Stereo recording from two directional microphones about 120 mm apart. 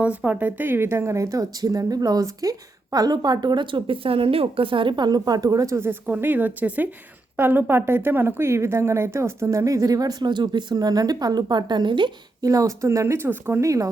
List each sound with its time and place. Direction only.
0.0 s speech: 10° right (ahead or behind); by 12.5 s 40° right (ahead or behind)
12.5 s speech: 25° right (ahead or behind)